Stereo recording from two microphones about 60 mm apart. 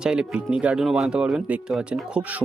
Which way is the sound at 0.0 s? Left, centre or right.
Centre.